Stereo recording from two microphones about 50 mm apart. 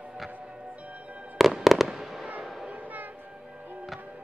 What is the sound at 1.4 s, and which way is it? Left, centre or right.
Fireworks, centre.